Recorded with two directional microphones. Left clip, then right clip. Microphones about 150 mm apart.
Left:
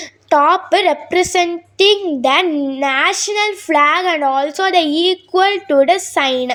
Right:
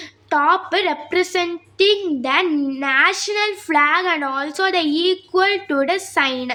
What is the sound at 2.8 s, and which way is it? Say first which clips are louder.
A woman's voice: left 1 dB; 35° left (ahead or behind).